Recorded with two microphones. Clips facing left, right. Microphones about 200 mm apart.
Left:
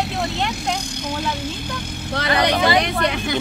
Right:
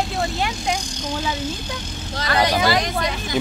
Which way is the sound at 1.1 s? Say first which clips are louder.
Right 1 dB; 60° left (ahead or behind).